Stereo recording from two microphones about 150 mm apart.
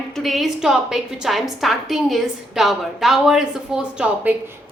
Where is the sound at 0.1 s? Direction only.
Centre (ahead or behind).